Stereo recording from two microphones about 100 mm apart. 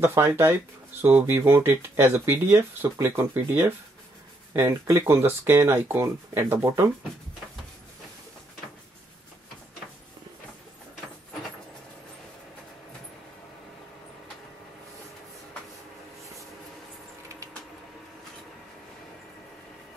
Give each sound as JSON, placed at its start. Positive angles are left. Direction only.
{"t": 0.0, "sound": "speech", "side_deg": -30}